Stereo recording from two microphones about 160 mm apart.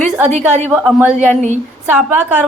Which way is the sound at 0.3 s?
45° right (ahead or behind).